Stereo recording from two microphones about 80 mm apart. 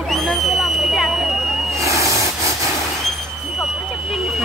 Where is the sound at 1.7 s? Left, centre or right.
Right.